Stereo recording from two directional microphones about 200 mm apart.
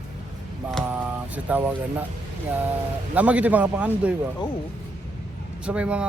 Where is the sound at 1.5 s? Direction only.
5° right (ahead or behind).